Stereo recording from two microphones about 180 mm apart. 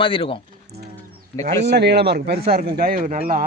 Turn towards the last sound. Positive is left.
turn(degrees=-50)  # may be behind; listen again after turning